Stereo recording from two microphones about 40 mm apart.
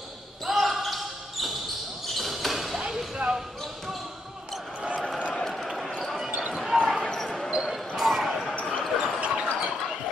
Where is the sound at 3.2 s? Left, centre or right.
Right.